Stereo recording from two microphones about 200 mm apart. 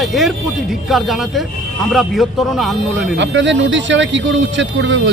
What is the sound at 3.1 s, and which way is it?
Speech, 65° right (ahead or behind).